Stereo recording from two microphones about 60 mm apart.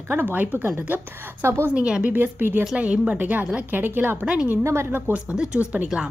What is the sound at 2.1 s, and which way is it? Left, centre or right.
Speech, right.